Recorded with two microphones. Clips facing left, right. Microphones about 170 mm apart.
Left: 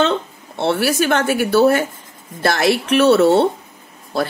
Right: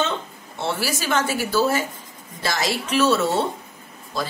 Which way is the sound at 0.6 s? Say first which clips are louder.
Left 9 dB; 65° left (ahead or behind).